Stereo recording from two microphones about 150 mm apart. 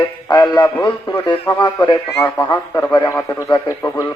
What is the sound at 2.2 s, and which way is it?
Speech, 15° left (ahead or behind).